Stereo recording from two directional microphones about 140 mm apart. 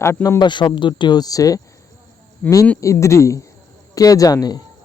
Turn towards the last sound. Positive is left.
turn(degrees=30)  # may be behind; listen again after turning